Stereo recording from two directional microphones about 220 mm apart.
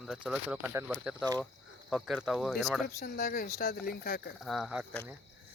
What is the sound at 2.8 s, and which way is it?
Speech, 45° left (ahead or behind).